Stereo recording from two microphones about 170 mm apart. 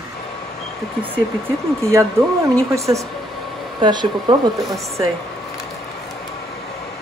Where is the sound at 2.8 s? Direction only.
20° right (ahead or behind).